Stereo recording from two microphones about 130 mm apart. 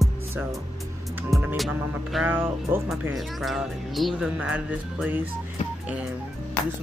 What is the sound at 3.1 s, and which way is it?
Speech, centre (ahead or behind).